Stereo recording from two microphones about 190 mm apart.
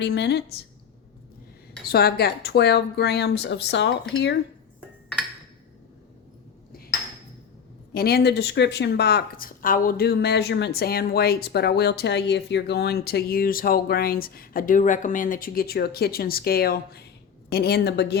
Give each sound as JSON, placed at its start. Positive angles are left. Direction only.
{"t": 0.0, "sound": "speech", "side_deg": 65}
{"t": 1.9, "sound": "speech", "side_deg": 55}
{"t": 7.9, "sound": "speech", "side_deg": 55}